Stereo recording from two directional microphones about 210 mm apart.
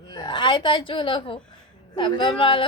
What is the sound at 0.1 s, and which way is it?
A woman's voice, 20° left (ahead or behind).